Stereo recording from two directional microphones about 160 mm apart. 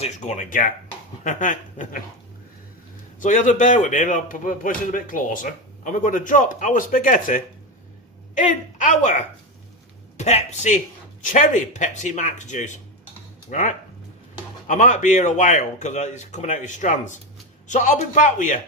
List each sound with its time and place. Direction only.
0.0 s speech: 50° left (ahead or behind)
3.2 s speech: 50° left (ahead or behind)